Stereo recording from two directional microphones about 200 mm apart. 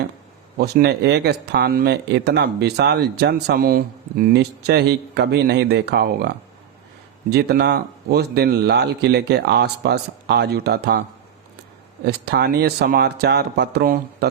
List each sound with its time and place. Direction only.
0.6 s speech: 55° right (ahead or behind)
12.0 s speech: 55° right (ahead or behind)